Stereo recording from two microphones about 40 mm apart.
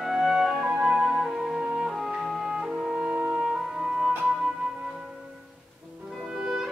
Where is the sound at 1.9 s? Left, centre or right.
Centre.